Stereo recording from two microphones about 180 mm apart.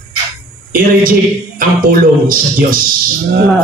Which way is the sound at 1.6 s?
50° right (ahead or behind).